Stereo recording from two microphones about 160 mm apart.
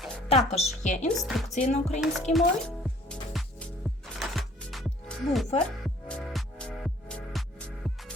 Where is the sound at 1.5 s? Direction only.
45° left (ahead or behind).